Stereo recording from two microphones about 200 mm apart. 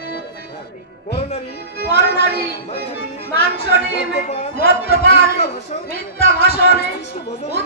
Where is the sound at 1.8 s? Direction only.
50° left (ahead or behind).